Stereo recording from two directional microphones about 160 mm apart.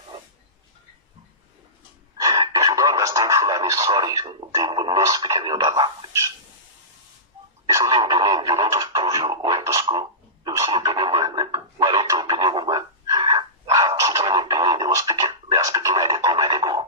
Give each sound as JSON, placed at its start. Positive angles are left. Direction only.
{"t": 2.2, "sound": "radio", "side_deg": -20}
{"t": 7.7, "sound": "radio", "side_deg": -20}
{"t": 8.7, "sound": "a sound", "side_deg": -20}
{"t": 12.0, "sound": "dog", "side_deg": -25}